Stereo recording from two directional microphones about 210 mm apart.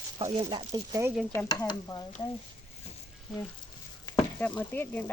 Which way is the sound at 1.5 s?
15° left (ahead or behind).